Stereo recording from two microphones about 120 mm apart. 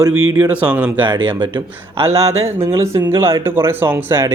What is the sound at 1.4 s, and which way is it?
Speech, 45° right (ahead or behind).